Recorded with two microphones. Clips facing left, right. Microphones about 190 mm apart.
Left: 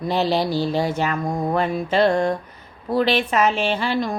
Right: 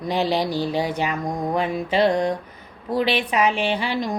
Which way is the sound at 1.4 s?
15° right (ahead or behind).